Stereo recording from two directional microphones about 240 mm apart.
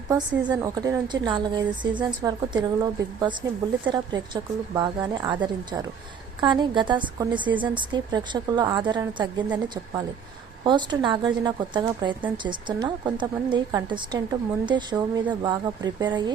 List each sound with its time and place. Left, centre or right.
0.1 s a woman's voice: centre
10.6 s a woman's voice: centre